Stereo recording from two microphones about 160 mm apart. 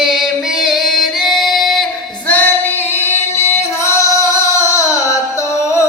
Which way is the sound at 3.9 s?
20° left (ahead or behind).